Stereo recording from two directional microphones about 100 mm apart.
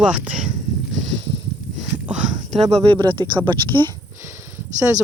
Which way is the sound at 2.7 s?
70° right (ahead or behind).